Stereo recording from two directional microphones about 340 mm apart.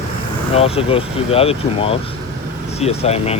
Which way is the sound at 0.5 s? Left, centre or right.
Centre.